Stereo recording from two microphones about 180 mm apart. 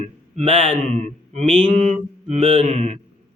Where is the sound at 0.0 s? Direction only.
35° right (ahead or behind).